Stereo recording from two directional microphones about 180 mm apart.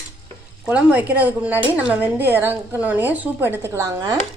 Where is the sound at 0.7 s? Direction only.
10° right (ahead or behind).